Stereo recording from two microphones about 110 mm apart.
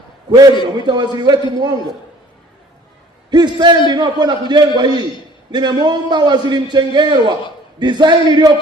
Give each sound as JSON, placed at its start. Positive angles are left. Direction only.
{"t": 0.3, "sound": "a man's voice", "side_deg": -35}
{"t": 3.2, "sound": "a man's voice", "side_deg": -40}